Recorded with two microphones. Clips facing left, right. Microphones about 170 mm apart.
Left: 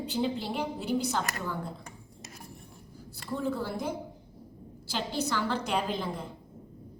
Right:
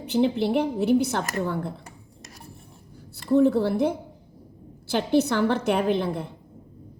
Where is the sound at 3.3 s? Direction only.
65° right (ahead or behind).